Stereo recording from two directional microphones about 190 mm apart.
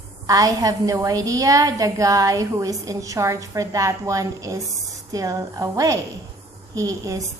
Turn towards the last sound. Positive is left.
turn(degrees=-15)  # may be behind; listen again after turning